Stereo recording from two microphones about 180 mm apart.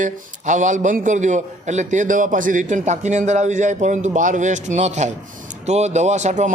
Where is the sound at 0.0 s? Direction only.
45° right (ahead or behind).